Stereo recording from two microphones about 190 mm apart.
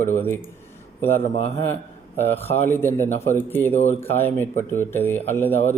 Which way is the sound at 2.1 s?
10° left (ahead or behind).